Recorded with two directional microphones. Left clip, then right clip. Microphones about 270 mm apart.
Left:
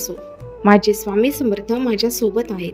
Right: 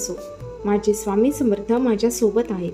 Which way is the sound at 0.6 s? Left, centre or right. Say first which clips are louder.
Left 7 dB; left.